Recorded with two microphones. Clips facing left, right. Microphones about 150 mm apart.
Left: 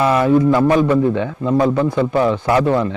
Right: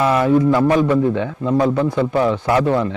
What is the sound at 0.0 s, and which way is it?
A man's voice, 20° left (ahead or behind).